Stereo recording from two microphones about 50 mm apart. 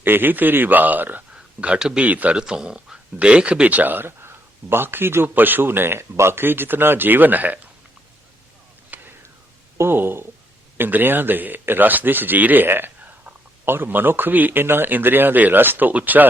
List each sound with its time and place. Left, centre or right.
0.0 s speech: right
1.6 s speech: centre
2.0 s speech: right
2.3 s speech: centre; by 5.3 s right
5.3 s speech: right
8.9 s whispering: right
9.7 s speech: right
15.9 s speech: right